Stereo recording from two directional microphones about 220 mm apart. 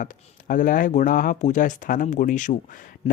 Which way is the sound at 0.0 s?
40° left (ahead or behind).